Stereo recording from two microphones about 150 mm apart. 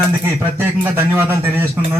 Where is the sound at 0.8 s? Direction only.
15° right (ahead or behind).